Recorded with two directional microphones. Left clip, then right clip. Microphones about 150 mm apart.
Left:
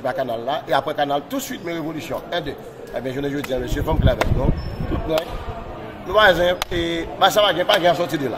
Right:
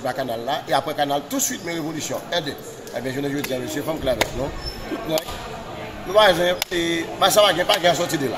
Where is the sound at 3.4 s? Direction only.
15° left (ahead or behind).